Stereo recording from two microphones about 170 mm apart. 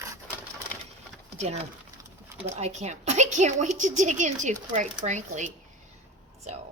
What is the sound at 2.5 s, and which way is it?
A woman's voice, 40° right (ahead or behind).